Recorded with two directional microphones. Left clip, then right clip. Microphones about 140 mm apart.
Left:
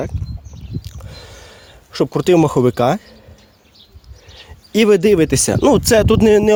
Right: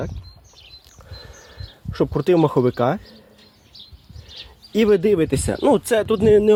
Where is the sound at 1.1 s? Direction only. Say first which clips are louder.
Left 4 dB; 30° left (ahead or behind).